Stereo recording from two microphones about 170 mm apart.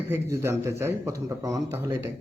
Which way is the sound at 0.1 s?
15° right (ahead or behind).